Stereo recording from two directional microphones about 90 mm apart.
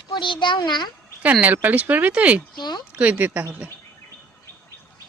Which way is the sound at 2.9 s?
15° right (ahead or behind).